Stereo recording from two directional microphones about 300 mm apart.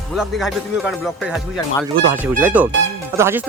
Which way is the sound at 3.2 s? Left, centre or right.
Centre.